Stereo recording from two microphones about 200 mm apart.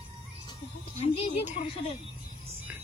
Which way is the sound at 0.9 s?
30° left (ahead or behind).